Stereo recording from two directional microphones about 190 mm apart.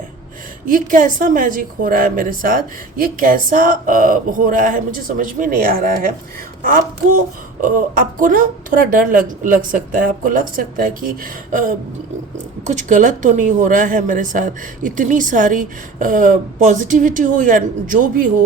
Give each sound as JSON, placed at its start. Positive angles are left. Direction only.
{"t": 0.7, "sound": "a woman's voice", "side_deg": -45}
{"t": 12.6, "sound": "a woman's voice", "side_deg": -40}